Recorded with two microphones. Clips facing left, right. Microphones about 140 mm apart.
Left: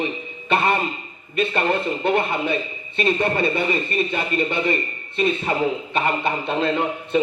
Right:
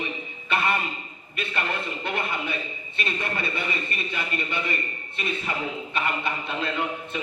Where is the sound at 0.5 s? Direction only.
30° left (ahead or behind).